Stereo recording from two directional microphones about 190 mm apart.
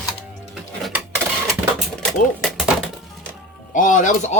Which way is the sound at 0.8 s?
Centre (ahead or behind).